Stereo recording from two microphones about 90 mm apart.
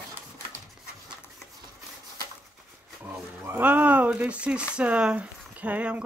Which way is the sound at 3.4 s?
20° right (ahead or behind).